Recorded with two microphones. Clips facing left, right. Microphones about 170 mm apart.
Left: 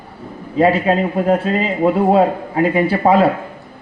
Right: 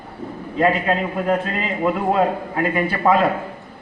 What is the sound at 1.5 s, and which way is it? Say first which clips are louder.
A man's voice: left 6 dB; 30° left (ahead or behind).